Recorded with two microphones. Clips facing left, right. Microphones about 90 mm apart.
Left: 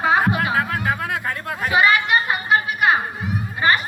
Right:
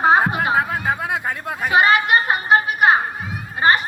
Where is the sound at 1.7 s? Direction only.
35° right (ahead or behind).